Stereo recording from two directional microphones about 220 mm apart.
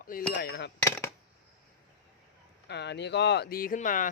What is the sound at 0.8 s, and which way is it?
Coin, 10° left (ahead or behind).